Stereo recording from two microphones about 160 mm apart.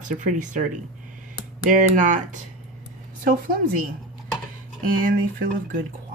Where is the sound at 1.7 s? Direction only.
55° right (ahead or behind).